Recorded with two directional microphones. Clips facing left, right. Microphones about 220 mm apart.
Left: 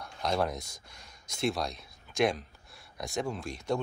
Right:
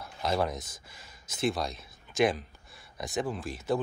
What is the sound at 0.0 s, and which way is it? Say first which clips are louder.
Speech: right 1 dB; centre (ahead or behind).